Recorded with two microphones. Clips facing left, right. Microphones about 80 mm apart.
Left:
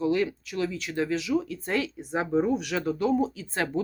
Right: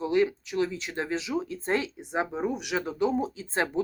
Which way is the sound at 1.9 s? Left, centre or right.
Centre.